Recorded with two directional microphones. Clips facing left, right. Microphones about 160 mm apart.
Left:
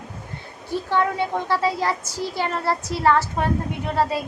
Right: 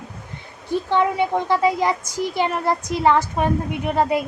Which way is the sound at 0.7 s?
20° right (ahead or behind).